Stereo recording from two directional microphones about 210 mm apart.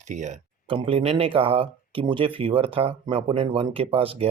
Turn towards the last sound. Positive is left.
turn(degrees=-25)  # may be behind; listen again after turning